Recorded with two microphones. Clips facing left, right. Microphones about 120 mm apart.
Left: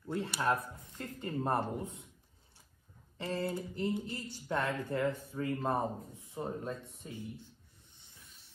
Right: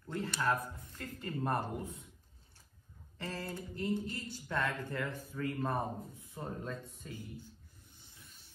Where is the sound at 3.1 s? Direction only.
20° left (ahead or behind).